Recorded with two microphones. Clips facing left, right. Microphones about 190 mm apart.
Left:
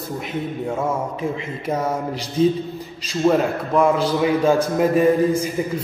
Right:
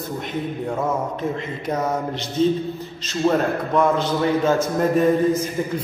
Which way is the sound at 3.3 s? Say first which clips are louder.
Left 2 dB; 5° left (ahead or behind).